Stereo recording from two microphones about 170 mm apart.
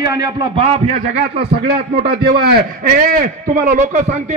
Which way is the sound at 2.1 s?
70° right (ahead or behind).